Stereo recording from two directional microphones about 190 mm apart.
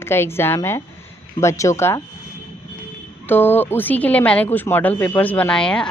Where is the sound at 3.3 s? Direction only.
10° left (ahead or behind).